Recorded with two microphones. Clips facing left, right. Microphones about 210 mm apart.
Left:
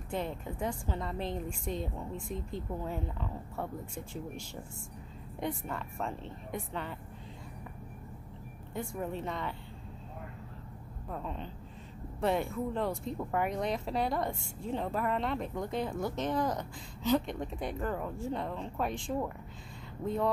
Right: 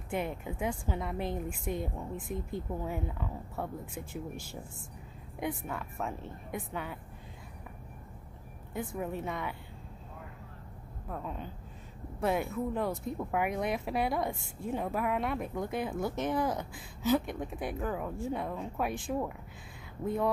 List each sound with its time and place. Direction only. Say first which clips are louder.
0.1 s speech: right 1 dB; 10° right (ahead or behind)
5.4 s speech: even; 5° right (ahead or behind)
8.7 s speech: right 1 dB; 5° right (ahead or behind)
11.1 s speech: even; 5° right (ahead or behind)